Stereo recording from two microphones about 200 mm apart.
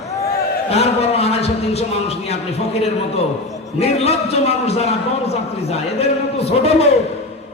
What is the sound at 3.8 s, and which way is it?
Music, 30° left (ahead or behind).